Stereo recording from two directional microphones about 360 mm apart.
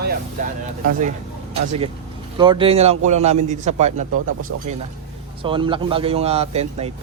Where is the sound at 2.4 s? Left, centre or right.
Centre.